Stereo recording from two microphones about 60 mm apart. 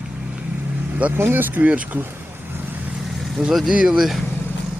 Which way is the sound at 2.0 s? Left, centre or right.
Right.